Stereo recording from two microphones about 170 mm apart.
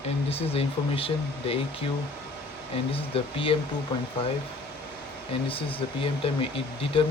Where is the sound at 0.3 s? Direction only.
35° left (ahead or behind).